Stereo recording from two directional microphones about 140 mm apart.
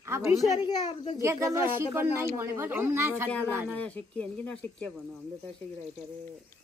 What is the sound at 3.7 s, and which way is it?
Speech, 10° left (ahead or behind).